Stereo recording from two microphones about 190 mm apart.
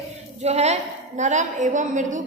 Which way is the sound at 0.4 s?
35° right (ahead or behind).